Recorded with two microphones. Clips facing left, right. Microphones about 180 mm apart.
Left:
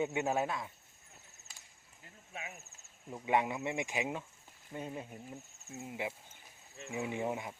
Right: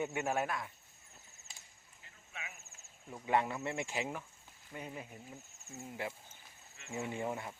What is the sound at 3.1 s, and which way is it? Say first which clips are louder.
Speech: left 1 dB; 15° left (ahead or behind).